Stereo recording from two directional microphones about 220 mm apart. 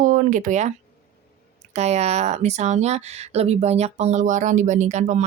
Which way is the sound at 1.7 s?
30° right (ahead or behind).